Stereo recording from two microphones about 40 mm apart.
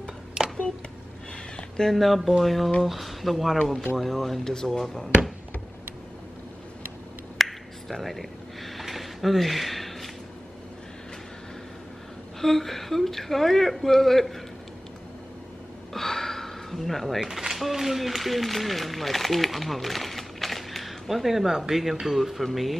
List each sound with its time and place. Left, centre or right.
0.4 s a sound: centre
2.0 s a woman's voice: centre
7.3 s a sound: centre
12.4 s a woman's voice: centre
15.9 s gasp: centre
17.3 s speech: centre